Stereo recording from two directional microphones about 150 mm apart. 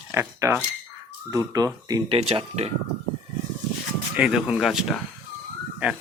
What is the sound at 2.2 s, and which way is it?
Speech, 40° right (ahead or behind).